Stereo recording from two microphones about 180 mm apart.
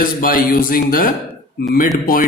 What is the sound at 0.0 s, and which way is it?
A man's voice, 50° left (ahead or behind).